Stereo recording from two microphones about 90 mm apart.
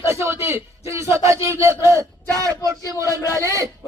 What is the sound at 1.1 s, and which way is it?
Speech, 30° right (ahead or behind).